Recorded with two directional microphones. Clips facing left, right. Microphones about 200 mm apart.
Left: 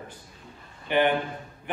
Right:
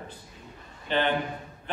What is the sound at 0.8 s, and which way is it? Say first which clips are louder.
Speech: left 4 dB; 15° left (ahead or behind).